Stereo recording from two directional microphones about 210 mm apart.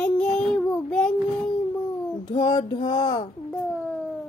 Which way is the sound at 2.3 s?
20° left (ahead or behind).